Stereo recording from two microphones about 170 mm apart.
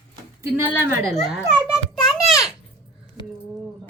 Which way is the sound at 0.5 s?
15° right (ahead or behind).